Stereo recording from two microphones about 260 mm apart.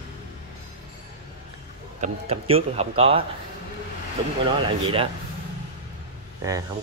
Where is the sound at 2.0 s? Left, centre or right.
Right.